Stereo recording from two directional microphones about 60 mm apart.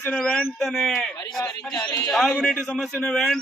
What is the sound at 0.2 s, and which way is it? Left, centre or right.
Speech, centre.